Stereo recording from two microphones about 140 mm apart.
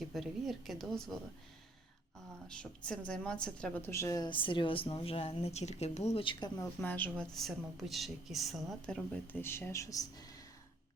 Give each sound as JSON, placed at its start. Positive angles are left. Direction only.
{"t": 0.1, "sound": "a woman's voice", "side_deg": 0}
{"t": 2.6, "sound": "a woman's voice", "side_deg": 10}
{"t": 6.6, "sound": "speech", "side_deg": 10}
{"t": 7.3, "sound": "a woman's voice", "side_deg": 0}